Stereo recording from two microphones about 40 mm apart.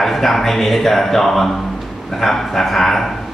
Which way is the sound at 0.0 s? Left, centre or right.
Centre.